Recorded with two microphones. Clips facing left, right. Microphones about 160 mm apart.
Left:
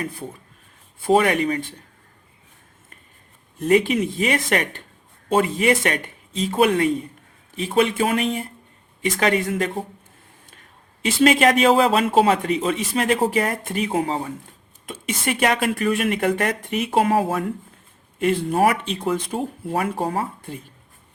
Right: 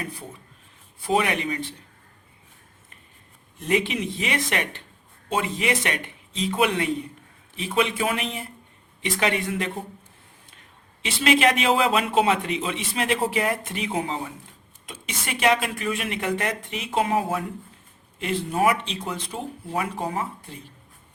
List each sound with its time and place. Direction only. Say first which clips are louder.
1.0 s a man's voice: left 6 dB; 45° left (ahead or behind)
3.6 s a man's voice: left 6 dB; 45° left (ahead or behind)
11.0 s a man's voice: left 4 dB; 45° left (ahead or behind)